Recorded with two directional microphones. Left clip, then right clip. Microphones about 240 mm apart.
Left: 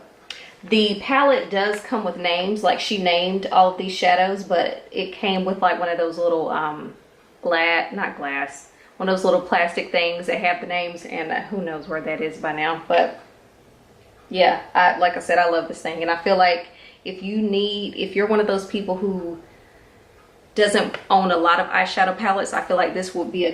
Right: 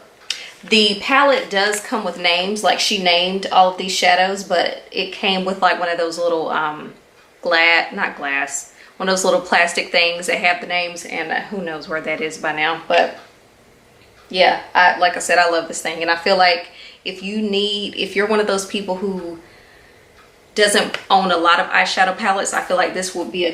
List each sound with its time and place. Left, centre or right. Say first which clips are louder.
0.3 s a woman's voice: right 4 dB; centre
14.3 s a woman's voice: right 3 dB; centre
18.9 s speech: left 1 dB; centre
20.5 s a woman's voice: right 3 dB; centre